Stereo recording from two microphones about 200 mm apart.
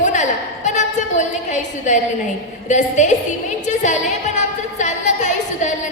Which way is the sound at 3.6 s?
35° left (ahead or behind).